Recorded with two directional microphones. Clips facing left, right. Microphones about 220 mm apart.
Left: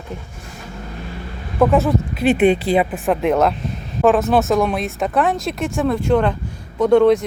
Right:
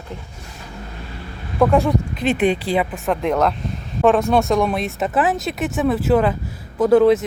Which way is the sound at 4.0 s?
Centre (ahead or behind).